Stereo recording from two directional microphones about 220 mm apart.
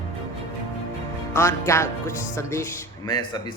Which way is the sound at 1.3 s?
10° left (ahead or behind).